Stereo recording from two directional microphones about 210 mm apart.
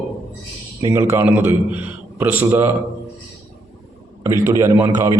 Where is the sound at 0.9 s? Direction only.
15° right (ahead or behind).